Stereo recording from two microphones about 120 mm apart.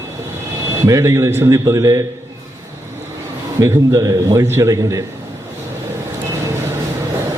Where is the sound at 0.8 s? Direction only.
25° right (ahead or behind).